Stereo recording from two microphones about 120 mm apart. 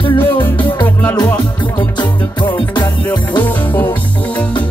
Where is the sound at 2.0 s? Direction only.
40° left (ahead or behind).